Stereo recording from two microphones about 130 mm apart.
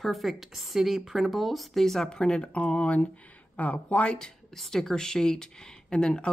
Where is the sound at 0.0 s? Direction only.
Centre (ahead or behind).